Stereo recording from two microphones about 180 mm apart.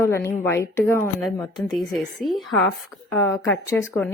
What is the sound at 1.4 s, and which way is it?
Speech, 25° left (ahead or behind).